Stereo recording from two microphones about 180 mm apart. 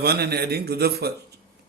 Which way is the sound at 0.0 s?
60° right (ahead or behind).